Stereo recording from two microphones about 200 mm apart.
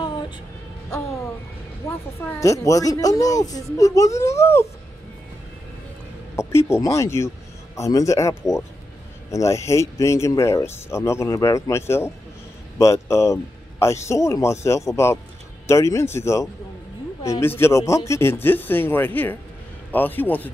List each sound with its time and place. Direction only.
1.8 s speech: 15° left (ahead or behind)
6.3 s speech: 15° left (ahead or behind)